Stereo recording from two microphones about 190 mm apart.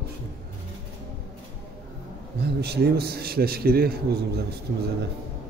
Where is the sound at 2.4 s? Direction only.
60° right (ahead or behind).